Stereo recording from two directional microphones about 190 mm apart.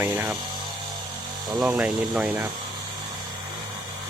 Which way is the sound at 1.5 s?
5° right (ahead or behind).